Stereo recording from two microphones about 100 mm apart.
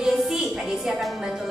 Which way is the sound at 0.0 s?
Centre (ahead or behind).